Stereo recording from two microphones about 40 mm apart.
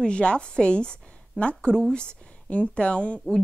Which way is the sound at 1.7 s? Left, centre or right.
Centre.